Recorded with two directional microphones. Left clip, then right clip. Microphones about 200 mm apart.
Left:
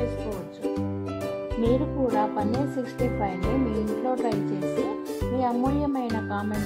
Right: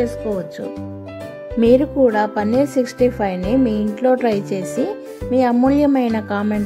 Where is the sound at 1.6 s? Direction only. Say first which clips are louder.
Right 12 dB; 10° right (ahead or behind).